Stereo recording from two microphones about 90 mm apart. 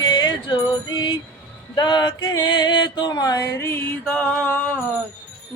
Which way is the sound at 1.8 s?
55° left (ahead or behind).